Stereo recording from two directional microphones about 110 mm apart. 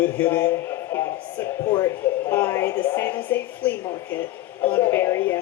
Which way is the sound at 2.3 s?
20° left (ahead or behind).